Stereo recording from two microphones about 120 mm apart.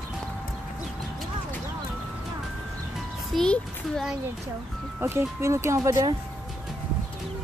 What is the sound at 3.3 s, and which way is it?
Speech, 5° left (ahead or behind).